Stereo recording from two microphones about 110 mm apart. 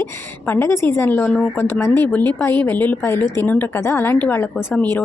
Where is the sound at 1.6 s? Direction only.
25° left (ahead or behind).